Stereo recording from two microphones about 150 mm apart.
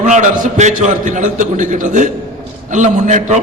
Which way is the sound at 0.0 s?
55° right (ahead or behind).